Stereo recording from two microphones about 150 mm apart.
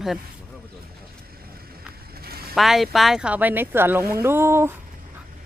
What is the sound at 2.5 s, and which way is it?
Speech, centre (ahead or behind).